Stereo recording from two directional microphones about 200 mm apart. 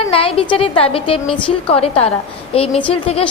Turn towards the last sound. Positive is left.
turn(degrees=30)  # may be behind; listen again after turning